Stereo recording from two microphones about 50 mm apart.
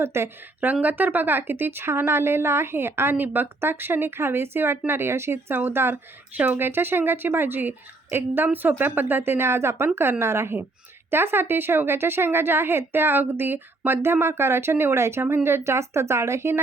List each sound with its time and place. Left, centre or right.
0.0 s a woman's voice: right
0.6 s speech: right
6.3 s speech: right
6.6 s speech: right
8.1 s a woman's voice: right
8.8 s a woman's voice: right
11.1 s speech: right